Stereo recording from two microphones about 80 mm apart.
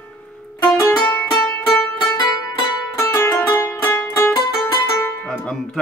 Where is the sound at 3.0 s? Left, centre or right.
Left.